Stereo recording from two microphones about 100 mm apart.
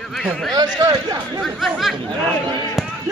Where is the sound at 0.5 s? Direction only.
45° right (ahead or behind).